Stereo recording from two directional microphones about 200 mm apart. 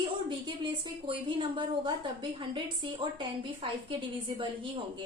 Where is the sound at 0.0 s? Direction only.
25° right (ahead or behind).